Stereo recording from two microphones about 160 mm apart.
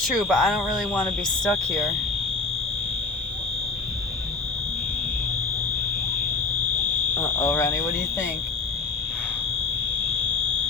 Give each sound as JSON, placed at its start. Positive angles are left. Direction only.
{"t": 0.0, "sound": "speech", "side_deg": 0}
{"t": 7.2, "sound": "speech", "side_deg": 15}